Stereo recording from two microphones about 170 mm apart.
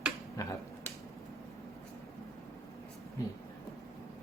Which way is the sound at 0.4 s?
20° left (ahead or behind).